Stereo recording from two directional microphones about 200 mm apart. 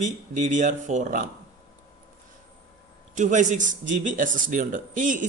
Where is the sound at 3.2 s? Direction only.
40° right (ahead or behind).